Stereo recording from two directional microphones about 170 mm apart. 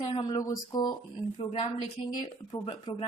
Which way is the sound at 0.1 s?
25° left (ahead or behind).